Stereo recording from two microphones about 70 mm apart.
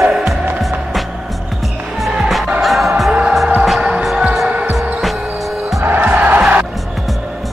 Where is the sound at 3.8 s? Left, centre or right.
Centre.